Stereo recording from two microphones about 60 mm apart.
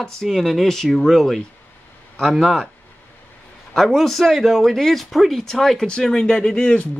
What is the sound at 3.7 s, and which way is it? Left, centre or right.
Speech, centre.